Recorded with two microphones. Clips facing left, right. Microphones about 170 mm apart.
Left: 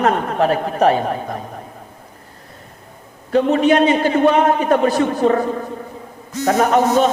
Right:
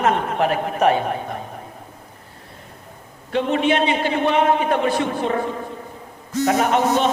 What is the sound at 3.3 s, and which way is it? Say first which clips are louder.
A man's voice: left 5 dB; 40° left (ahead or behind).